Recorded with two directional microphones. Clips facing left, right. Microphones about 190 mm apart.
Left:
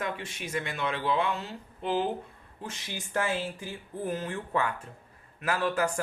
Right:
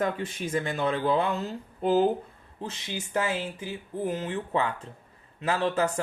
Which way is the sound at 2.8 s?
20° right (ahead or behind).